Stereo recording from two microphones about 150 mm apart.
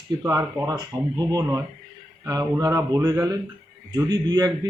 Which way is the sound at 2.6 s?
20° right (ahead or behind).